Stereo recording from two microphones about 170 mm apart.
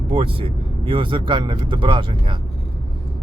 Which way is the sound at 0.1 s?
35° right (ahead or behind).